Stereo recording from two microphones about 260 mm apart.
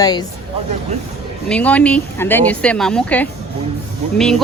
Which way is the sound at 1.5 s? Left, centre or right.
Centre.